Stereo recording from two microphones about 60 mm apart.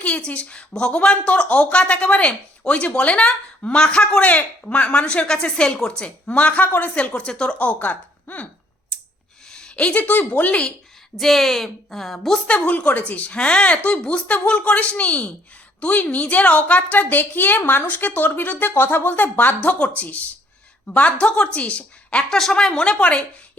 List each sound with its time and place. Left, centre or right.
0.0 s a woman's voice: left
7.8 s speech: left
9.5 s a woman's voice: centre
11.2 s a woman's voice: centre
12.5 s speech: left
18.7 s speech: left
19.5 s speech: centre
22.2 s speech: centre